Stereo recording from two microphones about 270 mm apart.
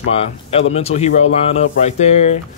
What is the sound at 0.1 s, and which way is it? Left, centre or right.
Speech, left.